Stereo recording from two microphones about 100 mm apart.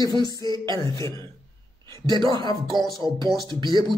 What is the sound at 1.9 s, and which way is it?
Speech, 40° left (ahead or behind).